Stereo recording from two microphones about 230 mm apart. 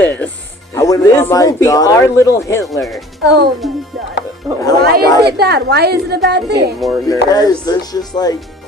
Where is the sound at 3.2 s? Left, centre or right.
Right.